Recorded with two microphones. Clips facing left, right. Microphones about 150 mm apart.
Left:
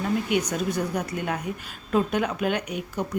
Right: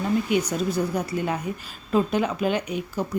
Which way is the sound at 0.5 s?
Centre (ahead or behind).